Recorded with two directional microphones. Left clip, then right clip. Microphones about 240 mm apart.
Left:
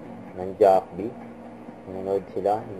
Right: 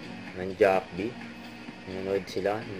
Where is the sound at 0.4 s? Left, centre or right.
Right.